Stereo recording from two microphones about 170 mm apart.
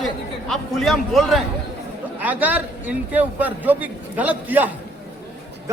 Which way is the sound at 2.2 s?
10° right (ahead or behind).